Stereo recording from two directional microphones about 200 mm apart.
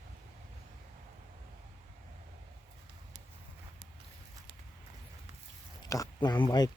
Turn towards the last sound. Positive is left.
turn(degrees=20)  # may be behind; listen again after turning